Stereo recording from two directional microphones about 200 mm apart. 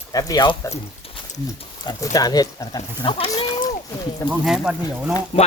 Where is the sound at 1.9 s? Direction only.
20° left (ahead or behind).